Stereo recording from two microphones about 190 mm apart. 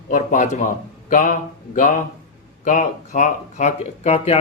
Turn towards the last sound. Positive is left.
turn(degrees=35)  # may be behind; listen again after turning